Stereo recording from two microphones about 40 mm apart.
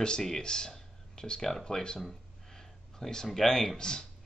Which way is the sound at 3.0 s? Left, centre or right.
Centre.